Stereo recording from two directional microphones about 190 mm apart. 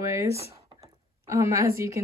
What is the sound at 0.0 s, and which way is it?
Speech, 15° right (ahead or behind).